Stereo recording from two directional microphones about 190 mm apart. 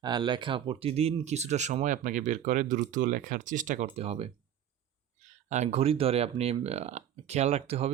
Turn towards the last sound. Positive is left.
turn(degrees=-35)  # may be behind; listen again after turning